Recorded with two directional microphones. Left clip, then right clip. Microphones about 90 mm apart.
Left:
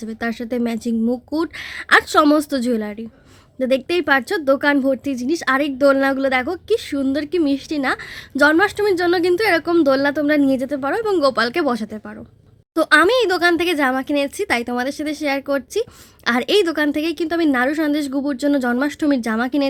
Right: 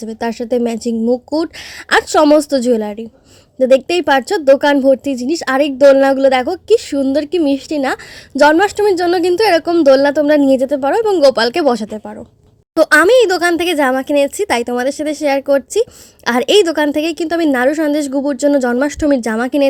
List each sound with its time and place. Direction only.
0.0 s a woman's voice: 45° right (ahead or behind)